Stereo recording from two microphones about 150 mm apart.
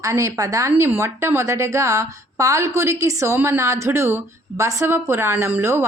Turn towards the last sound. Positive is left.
turn(degrees=-15)  # may be behind; listen again after turning